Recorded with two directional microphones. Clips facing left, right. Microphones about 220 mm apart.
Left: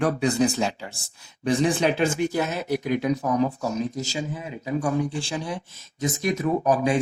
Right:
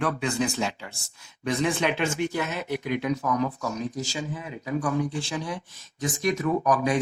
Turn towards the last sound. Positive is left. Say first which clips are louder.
# left 2 dB
turn(degrees=30)  # may be behind; listen again after turning